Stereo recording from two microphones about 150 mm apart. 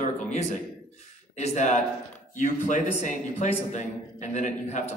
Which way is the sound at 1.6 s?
50° left (ahead or behind).